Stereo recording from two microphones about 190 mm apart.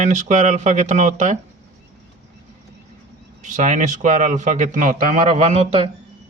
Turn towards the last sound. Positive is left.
turn(degrees=-30)  # may be behind; listen again after turning